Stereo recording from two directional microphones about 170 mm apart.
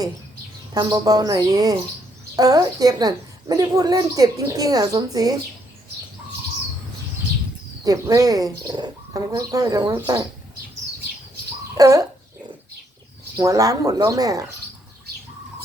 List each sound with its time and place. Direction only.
0.7 s a woman's voice: 20° right (ahead or behind)
7.9 s a woman's voice: 20° right (ahead or behind)
11.8 s a woman's voice: 20° right (ahead or behind)
13.3 s a woman's voice: 20° right (ahead or behind)